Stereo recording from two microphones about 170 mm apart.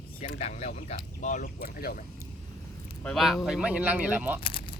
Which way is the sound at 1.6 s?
65° left (ahead or behind).